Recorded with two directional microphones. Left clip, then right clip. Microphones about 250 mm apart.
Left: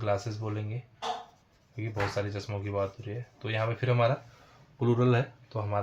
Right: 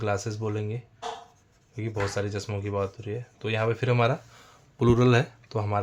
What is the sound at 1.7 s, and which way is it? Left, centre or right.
Speech, right.